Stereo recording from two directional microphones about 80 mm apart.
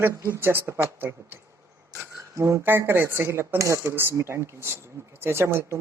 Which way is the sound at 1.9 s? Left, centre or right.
Right.